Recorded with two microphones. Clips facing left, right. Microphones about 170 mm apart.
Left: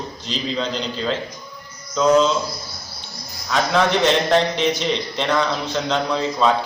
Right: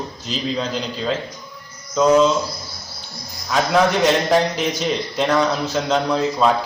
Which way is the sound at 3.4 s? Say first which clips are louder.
Right 2 dB; 10° right (ahead or behind).